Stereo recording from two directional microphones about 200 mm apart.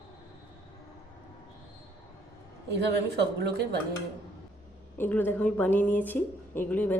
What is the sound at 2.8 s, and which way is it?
Speech, 55° right (ahead or behind).